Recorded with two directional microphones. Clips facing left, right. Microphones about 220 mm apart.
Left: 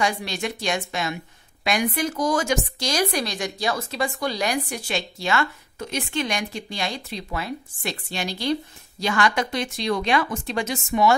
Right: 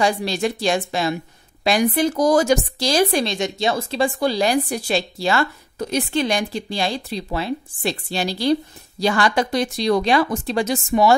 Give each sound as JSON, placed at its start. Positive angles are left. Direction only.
{"t": 0.0, "sound": "a woman's voice", "side_deg": -35}